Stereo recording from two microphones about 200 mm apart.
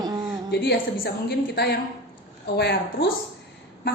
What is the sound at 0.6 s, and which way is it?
Speech, 55° left (ahead or behind).